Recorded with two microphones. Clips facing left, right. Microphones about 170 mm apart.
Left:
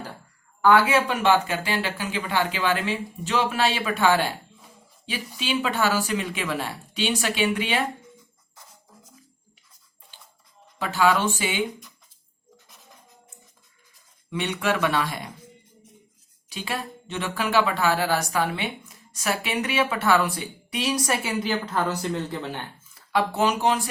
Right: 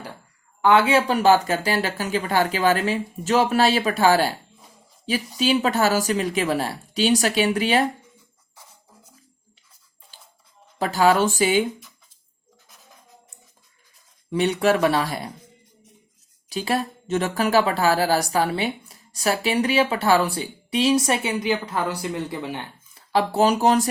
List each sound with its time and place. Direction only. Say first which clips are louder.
0.6 s a woman's voice: right 1 dB; 20° right (ahead or behind); by 4.3 s 35° right (ahead or behind)
5.4 s a woman's voice: right 5 dB; 40° right (ahead or behind)
10.8 s a woman's voice: right 4 dB; 40° right (ahead or behind)
12.6 s music: right 3 dB; centre (ahead or behind)
14.3 s a woman's voice: right 6 dB; 35° right (ahead or behind)
16.5 s a woman's voice: right 7 dB; 35° right (ahead or behind); by 22.6 s 15° right (ahead or behind)
23.0 s speech: right 4 dB; 35° right (ahead or behind)